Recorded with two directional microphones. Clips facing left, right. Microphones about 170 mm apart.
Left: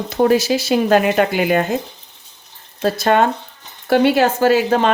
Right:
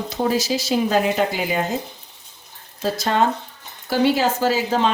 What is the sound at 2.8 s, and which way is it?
Speech, 60° left (ahead or behind).